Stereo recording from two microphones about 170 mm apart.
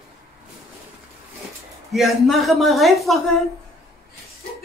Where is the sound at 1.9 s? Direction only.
Centre (ahead or behind).